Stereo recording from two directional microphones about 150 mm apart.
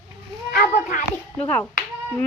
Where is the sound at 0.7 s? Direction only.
50° left (ahead or behind).